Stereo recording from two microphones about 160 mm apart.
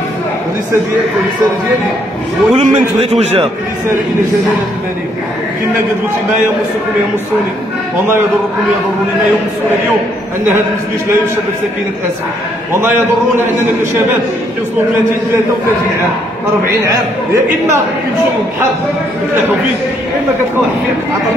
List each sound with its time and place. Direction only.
2.5 s a man's voice: 40° right (ahead or behind)
16.7 s a man's voice: 15° right (ahead or behind)